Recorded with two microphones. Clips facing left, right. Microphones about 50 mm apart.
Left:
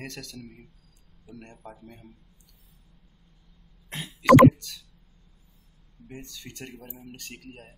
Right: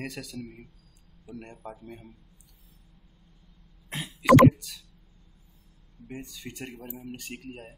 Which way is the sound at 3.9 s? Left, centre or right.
Centre.